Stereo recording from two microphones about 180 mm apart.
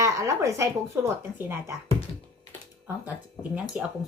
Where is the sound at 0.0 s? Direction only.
20° right (ahead or behind).